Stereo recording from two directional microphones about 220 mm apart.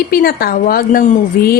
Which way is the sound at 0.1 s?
45° left (ahead or behind).